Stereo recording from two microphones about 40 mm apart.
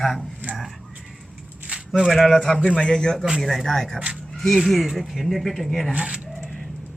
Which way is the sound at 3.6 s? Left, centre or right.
Centre.